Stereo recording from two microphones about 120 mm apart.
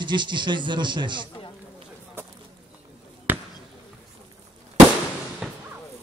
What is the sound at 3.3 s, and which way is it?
Basketball bounce, 15° right (ahead or behind).